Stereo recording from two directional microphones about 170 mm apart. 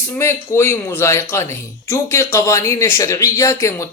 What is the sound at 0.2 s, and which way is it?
A man's voice, 15° left (ahead or behind).